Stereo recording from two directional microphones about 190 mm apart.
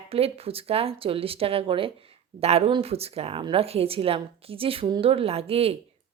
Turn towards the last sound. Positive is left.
turn(degrees=-30)  # may be behind; listen again after turning